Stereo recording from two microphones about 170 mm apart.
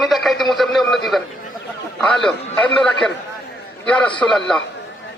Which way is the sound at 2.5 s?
5° left (ahead or behind).